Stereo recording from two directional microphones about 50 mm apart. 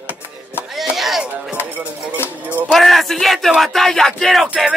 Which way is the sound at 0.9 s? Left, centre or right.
Centre.